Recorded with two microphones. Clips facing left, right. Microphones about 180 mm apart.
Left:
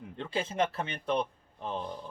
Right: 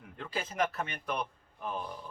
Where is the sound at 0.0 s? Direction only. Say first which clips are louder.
Left 4 dB; 25° left (ahead or behind).